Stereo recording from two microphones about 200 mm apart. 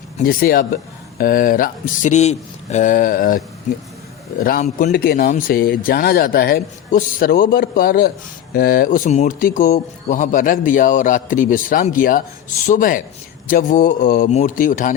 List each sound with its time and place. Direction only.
0.2 s a man's voice: 45° left (ahead or behind)